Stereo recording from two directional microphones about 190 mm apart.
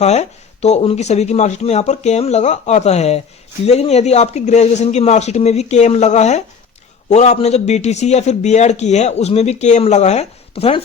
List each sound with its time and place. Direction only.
0.0 s a man's voice: 35° left (ahead or behind)